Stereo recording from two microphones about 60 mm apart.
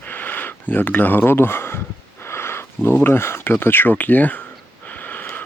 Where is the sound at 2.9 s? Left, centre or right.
Left.